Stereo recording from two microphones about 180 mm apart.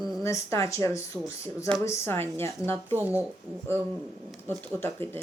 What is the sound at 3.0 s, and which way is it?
Speech, 10° right (ahead or behind).